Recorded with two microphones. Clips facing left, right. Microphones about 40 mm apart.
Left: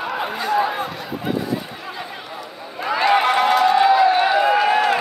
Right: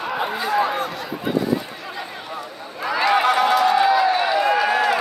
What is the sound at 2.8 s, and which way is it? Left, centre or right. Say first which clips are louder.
Run: left 1 dB; centre.